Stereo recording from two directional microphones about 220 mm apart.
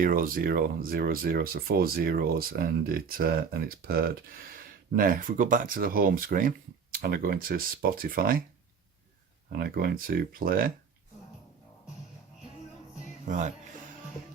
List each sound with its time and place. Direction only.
0.0 s speech: 40° right (ahead or behind)
9.5 s speech: 45° right (ahead or behind)
13.2 s speech: 35° right (ahead or behind)